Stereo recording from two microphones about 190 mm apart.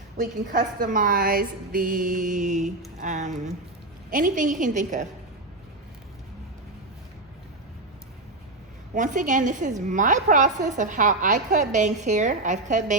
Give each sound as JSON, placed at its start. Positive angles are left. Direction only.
{"t": 0.2, "sound": "a woman's voice", "side_deg": -45}
{"t": 9.0, "sound": "a woman's voice", "side_deg": -40}